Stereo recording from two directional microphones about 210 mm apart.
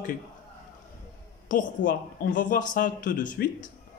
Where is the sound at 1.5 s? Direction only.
40° left (ahead or behind).